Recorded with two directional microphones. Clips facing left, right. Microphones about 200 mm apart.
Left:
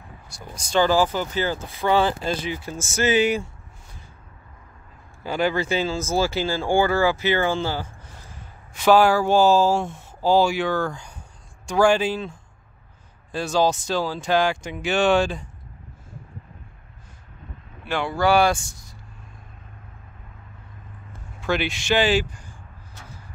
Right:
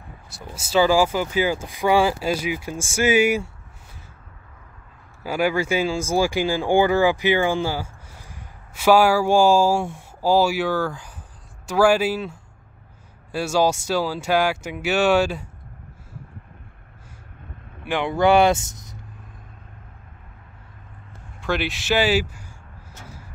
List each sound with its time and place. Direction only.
0.3 s speech: 5° right (ahead or behind)
5.2 s speech: 10° right (ahead or behind)
17.8 s speech: 20° right (ahead or behind)
21.4 s speech: centre (ahead or behind)